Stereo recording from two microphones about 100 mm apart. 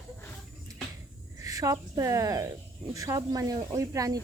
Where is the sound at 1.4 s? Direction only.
35° right (ahead or behind).